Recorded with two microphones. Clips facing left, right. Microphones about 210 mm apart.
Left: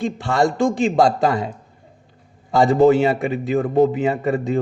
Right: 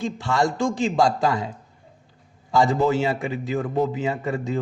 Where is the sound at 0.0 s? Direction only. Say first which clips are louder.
Left 4 dB; 60° left (ahead or behind).